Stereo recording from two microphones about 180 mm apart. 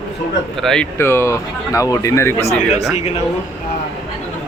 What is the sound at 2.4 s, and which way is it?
Speech, 35° left (ahead or behind).